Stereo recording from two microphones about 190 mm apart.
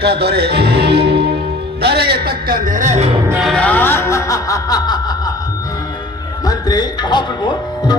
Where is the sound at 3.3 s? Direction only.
Centre (ahead or behind); by 6.0 s 20° left (ahead or behind).